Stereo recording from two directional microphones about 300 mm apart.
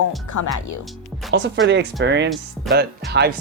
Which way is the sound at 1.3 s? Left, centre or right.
Right.